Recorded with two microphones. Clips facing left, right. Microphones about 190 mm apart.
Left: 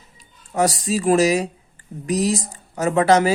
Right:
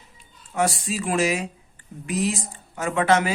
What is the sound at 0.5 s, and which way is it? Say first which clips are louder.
Speech: left 4 dB; 40° left (ahead or behind).